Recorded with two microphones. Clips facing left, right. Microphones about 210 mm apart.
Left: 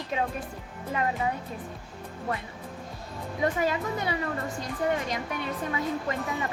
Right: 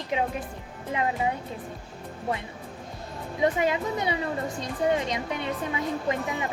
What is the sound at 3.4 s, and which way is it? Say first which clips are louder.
A woman's voice: right 3 dB; 20° right (ahead or behind).